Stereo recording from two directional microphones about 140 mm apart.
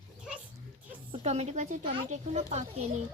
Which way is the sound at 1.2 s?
50° right (ahead or behind).